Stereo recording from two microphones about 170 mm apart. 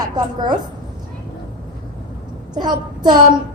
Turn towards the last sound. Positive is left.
turn(degrees=-25)  # may be behind; listen again after turning